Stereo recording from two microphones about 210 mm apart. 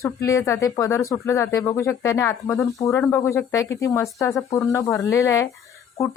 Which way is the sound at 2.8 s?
15° left (ahead or behind).